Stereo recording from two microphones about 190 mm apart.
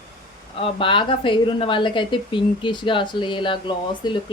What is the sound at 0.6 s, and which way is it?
Speech, 25° left (ahead or behind).